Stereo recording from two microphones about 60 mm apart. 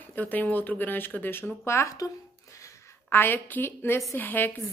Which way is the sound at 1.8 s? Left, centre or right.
Left.